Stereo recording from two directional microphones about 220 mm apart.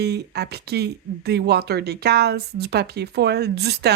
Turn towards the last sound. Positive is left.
turn(degrees=-50)  # may be behind; listen again after turning